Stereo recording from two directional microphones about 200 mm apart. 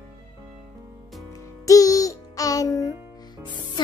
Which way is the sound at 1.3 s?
15° left (ahead or behind).